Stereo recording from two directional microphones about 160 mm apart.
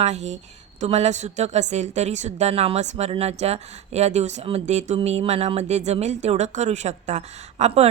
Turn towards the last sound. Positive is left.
turn(degrees=-45)  # may be behind; listen again after turning